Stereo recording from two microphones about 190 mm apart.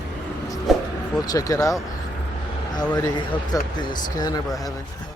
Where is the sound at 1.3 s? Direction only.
20° left (ahead or behind).